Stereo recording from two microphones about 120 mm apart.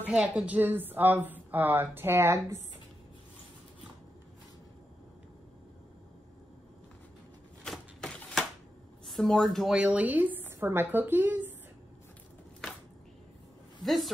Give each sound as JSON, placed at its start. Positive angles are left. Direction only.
{"t": 0.0, "sound": "a woman's voice", "side_deg": -10}
{"t": 7.6, "sound": "typewriter", "side_deg": 5}
{"t": 9.0, "sound": "a woman's voice", "side_deg": 0}
{"t": 13.8, "sound": "a woman's voice", "side_deg": 0}